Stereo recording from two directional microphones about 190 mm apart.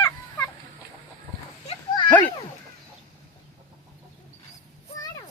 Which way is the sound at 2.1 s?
10° left (ahead or behind).